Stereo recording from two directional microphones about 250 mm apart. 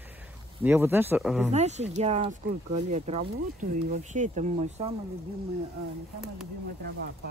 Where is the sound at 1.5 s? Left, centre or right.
Right.